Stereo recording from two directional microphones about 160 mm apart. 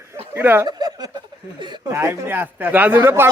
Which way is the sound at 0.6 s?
25° right (ahead or behind).